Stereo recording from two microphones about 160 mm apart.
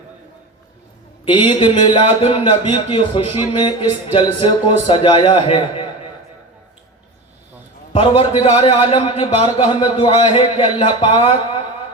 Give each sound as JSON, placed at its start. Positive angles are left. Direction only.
{"t": 1.2, "sound": "a man's voice", "side_deg": 30}
{"t": 3.5, "sound": "music", "side_deg": 30}
{"t": 4.0, "sound": "a man's voice", "side_deg": 30}
{"t": 7.9, "sound": "a man's voice", "side_deg": 35}